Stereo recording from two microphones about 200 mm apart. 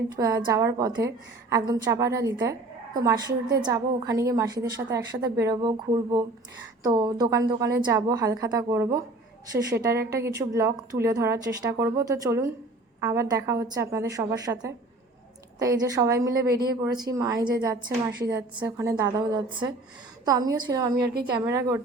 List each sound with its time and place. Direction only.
0.2 s a woman's voice: 15° right (ahead or behind)
20.9 s a woman's voice: 50° right (ahead or behind)
21.4 s a woman's voice: 15° right (ahead or behind)